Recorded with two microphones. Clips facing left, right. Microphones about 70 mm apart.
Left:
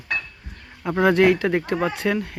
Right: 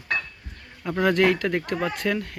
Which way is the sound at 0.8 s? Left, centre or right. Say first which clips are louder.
Left 4 dB; left.